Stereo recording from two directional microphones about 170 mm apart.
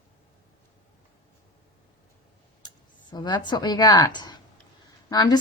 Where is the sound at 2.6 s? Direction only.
25° left (ahead or behind).